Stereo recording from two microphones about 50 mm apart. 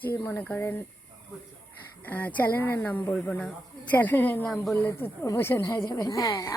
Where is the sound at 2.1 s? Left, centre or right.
Left.